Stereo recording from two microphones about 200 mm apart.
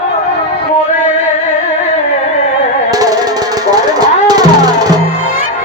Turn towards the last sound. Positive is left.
turn(degrees=-20)  # may be behind; listen again after turning